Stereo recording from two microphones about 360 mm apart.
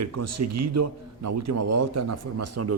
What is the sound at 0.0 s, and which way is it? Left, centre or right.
A man's voice, right.